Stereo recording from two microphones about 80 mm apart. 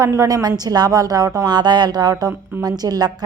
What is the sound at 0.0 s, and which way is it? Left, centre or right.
A woman's voice, right.